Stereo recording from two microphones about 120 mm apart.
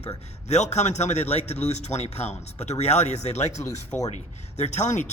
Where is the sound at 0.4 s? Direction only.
70° left (ahead or behind).